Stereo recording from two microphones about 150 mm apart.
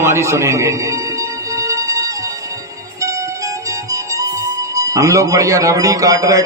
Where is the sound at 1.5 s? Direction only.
20° right (ahead or behind).